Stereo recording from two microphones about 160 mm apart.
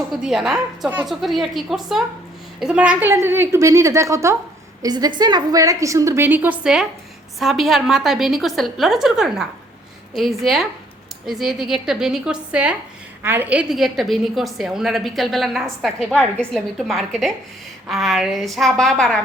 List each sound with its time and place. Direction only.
0.1 s a woman's voice: centre (ahead or behind)